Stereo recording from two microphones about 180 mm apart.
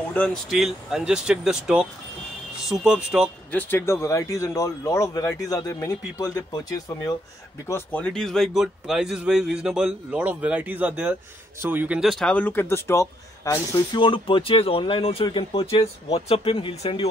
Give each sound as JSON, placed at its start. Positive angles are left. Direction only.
{"t": 0.1, "sound": "speech", "side_deg": 10}
{"t": 3.5, "sound": "speech", "side_deg": 15}
{"t": 7.6, "sound": "speech", "side_deg": 10}
{"t": 14.0, "sound": "speech", "side_deg": 30}